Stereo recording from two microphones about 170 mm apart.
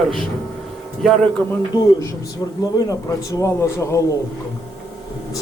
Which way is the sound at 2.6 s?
20° left (ahead or behind).